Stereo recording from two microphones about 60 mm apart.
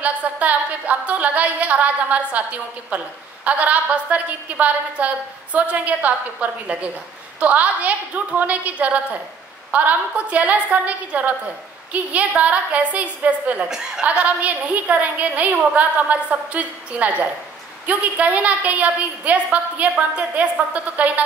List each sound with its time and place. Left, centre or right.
0.0 s a woman's voice: right
13.6 s a woman's voice: centre
14.0 s a woman's voice: right